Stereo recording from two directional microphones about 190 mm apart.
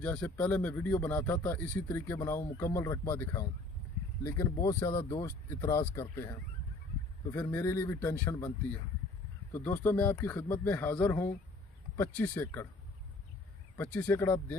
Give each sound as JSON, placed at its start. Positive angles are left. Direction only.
{"t": 0.0, "sound": "speech", "side_deg": 5}
{"t": 7.3, "sound": "speech", "side_deg": 15}
{"t": 13.9, "sound": "speech", "side_deg": 10}